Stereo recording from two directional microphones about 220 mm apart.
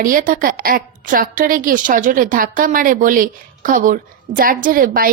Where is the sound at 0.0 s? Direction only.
40° right (ahead or behind).